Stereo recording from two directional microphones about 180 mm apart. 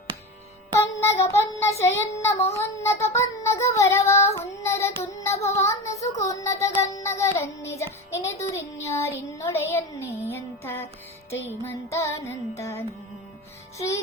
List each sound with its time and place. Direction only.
0.7 s music: 15° left (ahead or behind)